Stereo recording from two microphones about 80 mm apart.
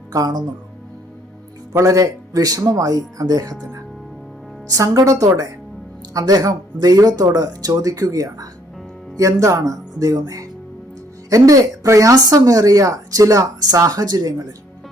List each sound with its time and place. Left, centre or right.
0.1 s speech: right
1.8 s speech: right
4.7 s speech: right